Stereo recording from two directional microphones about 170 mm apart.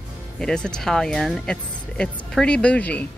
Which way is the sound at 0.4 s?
5° left (ahead or behind).